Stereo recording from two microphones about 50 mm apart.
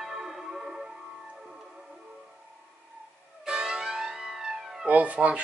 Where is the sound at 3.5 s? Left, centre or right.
Centre.